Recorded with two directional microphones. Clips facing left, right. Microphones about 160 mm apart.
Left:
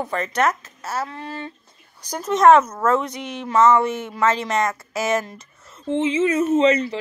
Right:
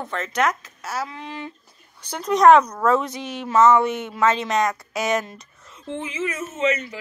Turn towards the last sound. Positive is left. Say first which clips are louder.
# left 7 dB
turn(degrees=30)  # may be behind; listen again after turning